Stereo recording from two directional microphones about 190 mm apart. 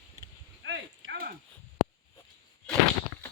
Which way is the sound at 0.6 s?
75° right (ahead or behind).